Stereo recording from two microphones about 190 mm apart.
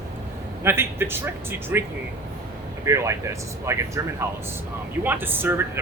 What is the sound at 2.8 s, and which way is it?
Speech, 15° right (ahead or behind).